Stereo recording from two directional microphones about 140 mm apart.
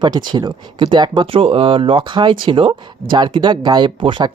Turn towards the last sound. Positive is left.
turn(degrees=-35)  # may be behind; listen again after turning